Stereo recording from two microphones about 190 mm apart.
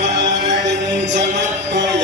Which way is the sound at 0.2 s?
65° right (ahead or behind).